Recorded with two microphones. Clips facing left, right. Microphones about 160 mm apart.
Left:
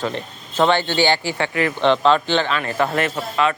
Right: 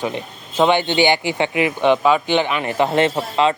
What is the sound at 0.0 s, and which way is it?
Speech, 15° right (ahead or behind).